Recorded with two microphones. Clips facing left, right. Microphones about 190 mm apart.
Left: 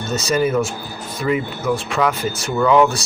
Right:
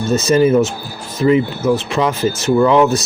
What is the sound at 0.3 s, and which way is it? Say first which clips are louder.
Speech: right 5 dB; 25° right (ahead or behind).